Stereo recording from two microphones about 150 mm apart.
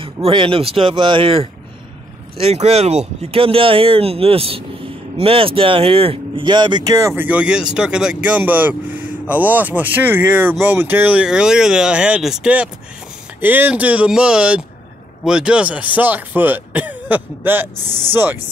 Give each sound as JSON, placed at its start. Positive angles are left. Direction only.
{"t": 0.0, "sound": "speech", "side_deg": -35}
{"t": 7.2, "sound": "speech", "side_deg": -10}